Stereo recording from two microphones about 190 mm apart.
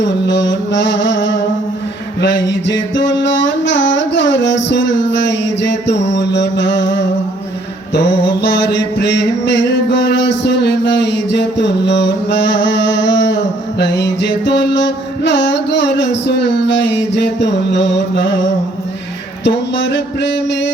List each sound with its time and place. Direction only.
0.0 s music: 70° left (ahead or behind)
6.1 s mantra: 65° left (ahead or behind)
9.0 s a sound: 65° left (ahead or behind)
13.7 s music: 65° left (ahead or behind)
19.5 s music: 65° left (ahead or behind)